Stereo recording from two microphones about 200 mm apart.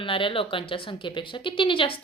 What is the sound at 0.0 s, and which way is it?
Speech, 25° left (ahead or behind).